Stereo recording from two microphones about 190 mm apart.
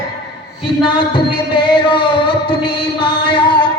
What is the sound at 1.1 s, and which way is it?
Music, 25° left (ahead or behind).